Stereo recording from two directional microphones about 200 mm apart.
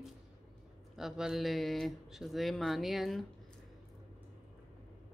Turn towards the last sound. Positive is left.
turn(degrees=0)  # may be behind; listen again after turning